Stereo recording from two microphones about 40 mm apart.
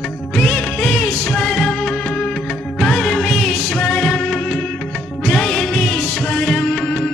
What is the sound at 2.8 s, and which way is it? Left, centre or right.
Music of bollywood, centre.